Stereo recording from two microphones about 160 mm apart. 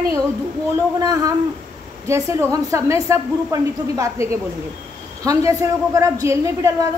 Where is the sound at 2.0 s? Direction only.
20° right (ahead or behind).